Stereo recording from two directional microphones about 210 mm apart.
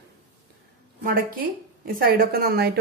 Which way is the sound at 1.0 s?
45° right (ahead or behind).